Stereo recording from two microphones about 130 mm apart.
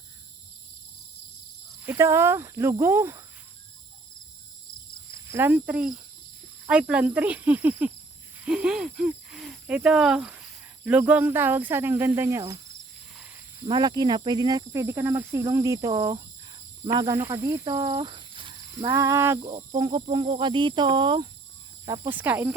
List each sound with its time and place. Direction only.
1.8 s speech: 20° right (ahead or behind)
5.1 s speech: 15° right (ahead or behind)
13.1 s cricket: 15° right (ahead or behind)
13.7 s speech: 35° right (ahead or behind)
18.8 s speech: 30° right (ahead or behind)
19.4 s speech: 35° right (ahead or behind)
22.1 s speech: 15° right (ahead or behind)